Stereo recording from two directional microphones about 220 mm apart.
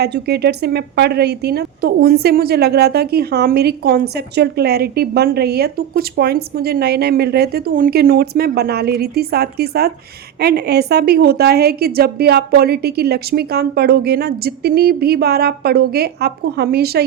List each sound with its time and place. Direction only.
0.0 s speech: 50° right (ahead or behind)